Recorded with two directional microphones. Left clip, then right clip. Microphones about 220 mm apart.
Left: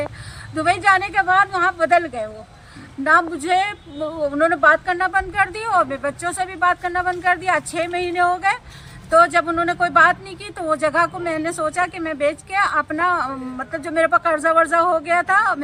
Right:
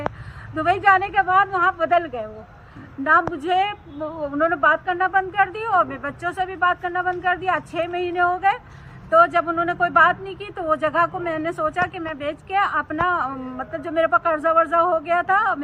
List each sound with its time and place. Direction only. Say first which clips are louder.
0.5 s a woman's voice: left 1 dB; 15° left (ahead or behind)